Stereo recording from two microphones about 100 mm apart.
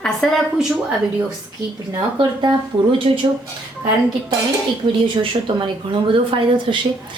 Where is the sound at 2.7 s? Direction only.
55° right (ahead or behind).